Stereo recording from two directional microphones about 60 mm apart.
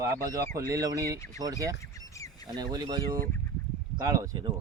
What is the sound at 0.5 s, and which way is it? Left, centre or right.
Speech, right.